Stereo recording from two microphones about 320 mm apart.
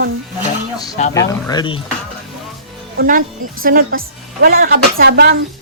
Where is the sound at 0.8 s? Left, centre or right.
Centre.